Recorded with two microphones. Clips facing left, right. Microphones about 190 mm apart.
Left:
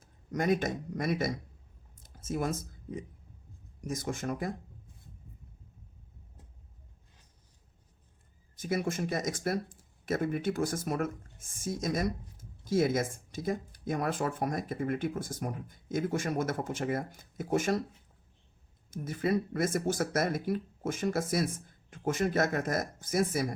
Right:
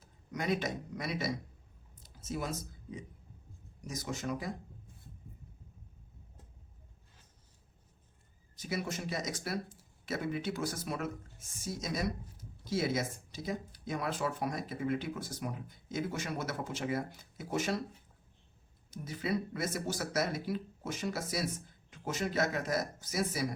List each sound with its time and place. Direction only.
0.0 s speech: 50° left (ahead or behind)
8.5 s speech: 50° left (ahead or behind)
18.9 s speech: 50° left (ahead or behind)